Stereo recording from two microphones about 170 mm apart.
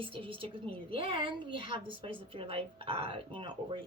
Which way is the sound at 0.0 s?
30° right (ahead or behind).